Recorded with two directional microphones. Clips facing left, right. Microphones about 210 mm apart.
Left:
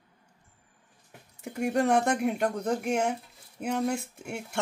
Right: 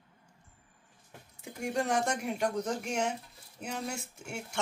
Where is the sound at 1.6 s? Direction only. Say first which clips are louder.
Left 6 dB; 60° left (ahead or behind).